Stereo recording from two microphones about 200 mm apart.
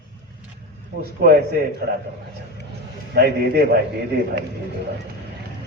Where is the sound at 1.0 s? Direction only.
50° right (ahead or behind).